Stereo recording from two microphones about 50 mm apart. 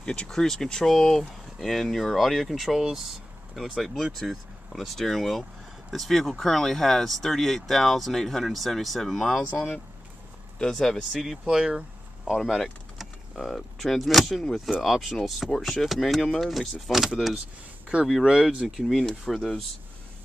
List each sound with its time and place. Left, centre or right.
0.0 s speech: left
0.3 s speech: centre
10.6 s speech: centre
11.0 s speech: centre
11.4 s speech: centre
12.4 s speech: centre
18.8 s speech: centre